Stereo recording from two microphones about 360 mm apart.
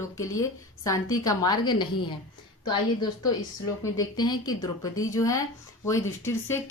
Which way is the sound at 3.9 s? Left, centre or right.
Centre.